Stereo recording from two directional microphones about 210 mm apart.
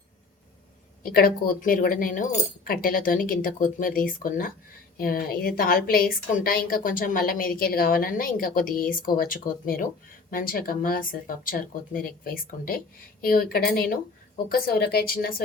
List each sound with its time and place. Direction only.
1.0 s a woman's voice: 45° left (ahead or behind)